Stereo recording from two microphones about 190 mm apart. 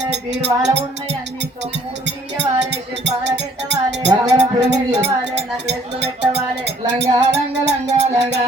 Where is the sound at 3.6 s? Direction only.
65° right (ahead or behind).